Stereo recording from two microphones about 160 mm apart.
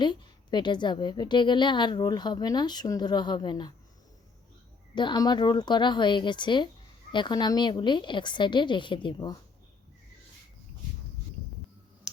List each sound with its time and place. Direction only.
0.0 s a woman's voice: 30° left (ahead or behind)
4.9 s a woman's voice: 25° left (ahead or behind)